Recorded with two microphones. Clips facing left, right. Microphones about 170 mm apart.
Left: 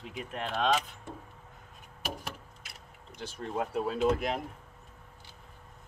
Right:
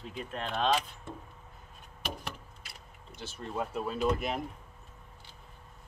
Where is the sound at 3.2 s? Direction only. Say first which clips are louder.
Left 2 dB; 10° left (ahead or behind).